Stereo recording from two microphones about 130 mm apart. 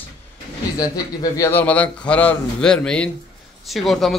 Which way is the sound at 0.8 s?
30° left (ahead or behind).